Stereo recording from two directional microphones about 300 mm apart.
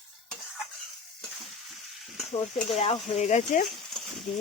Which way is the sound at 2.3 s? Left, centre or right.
Left.